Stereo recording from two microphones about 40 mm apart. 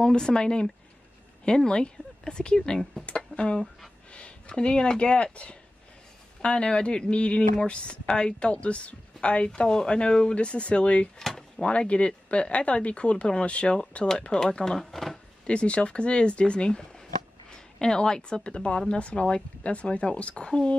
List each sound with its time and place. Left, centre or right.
0.0 s speech: centre
9.7 s speech: left
11.2 s a sound: centre
11.6 s a woman's voice: left
14.6 s speech: centre
15.4 s speech: left